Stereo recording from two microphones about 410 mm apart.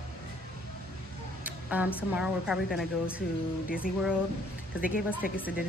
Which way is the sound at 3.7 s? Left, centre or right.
Left.